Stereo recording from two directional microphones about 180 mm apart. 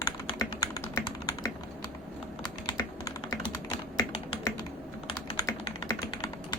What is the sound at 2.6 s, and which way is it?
Typing, 20° left (ahead or behind).